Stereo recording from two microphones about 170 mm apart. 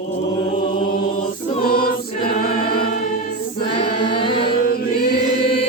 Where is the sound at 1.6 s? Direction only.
60° left (ahead or behind).